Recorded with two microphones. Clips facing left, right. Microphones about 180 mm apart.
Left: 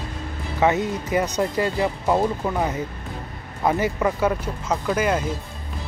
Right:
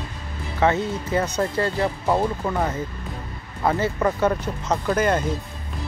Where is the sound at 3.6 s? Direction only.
15° left (ahead or behind).